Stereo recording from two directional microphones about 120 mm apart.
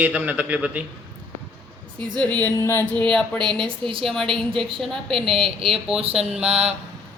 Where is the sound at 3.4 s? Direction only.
40° right (ahead or behind).